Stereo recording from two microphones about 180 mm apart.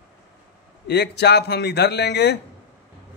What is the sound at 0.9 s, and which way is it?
A man's voice, 65° left (ahead or behind).